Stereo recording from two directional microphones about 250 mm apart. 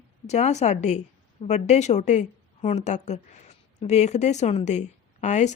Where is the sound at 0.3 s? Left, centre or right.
Left.